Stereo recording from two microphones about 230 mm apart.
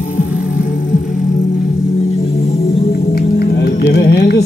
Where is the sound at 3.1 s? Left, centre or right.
Left.